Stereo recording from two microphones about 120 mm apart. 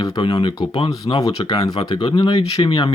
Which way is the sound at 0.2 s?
45° left (ahead or behind).